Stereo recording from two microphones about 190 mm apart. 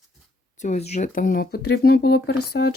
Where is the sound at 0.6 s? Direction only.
35° left (ahead or behind).